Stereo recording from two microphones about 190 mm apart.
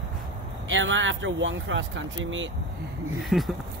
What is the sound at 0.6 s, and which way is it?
Speech, 80° right.